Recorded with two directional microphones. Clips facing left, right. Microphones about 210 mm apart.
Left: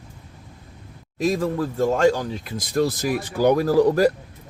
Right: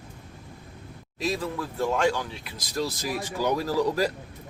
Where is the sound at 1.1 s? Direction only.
45° left (ahead or behind).